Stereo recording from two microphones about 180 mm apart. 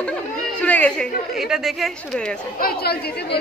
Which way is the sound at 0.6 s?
10° left (ahead or behind).